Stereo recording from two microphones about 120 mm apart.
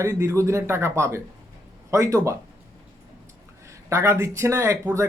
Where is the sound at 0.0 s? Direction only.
25° right (ahead or behind).